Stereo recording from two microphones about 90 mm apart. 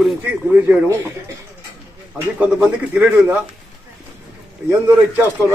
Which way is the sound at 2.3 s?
10° right (ahead or behind).